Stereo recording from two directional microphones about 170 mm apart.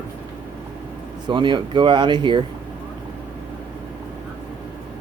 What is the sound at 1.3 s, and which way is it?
Speech, 25° right (ahead or behind).